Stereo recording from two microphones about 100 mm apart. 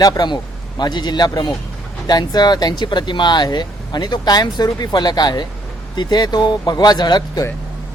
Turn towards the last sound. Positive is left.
turn(degrees=45)  # may be behind; listen again after turning